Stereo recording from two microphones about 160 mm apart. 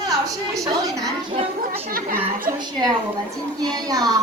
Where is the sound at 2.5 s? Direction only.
25° right (ahead or behind).